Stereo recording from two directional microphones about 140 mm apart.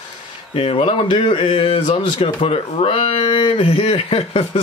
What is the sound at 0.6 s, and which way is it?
Speech, 40° left (ahead or behind).